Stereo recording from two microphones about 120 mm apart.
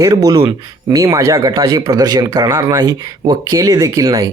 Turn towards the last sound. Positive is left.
turn(degrees=-30)  # may be behind; listen again after turning